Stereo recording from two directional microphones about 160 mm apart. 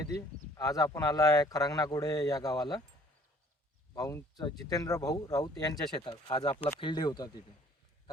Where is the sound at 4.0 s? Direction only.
20° left (ahead or behind).